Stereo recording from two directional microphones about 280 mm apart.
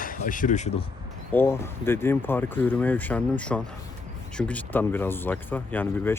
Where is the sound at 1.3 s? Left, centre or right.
Centre.